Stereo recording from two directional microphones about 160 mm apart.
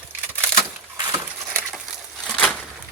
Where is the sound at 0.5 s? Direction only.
25° right (ahead or behind).